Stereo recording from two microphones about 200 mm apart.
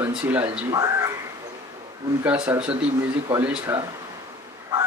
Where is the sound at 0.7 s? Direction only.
20° right (ahead or behind).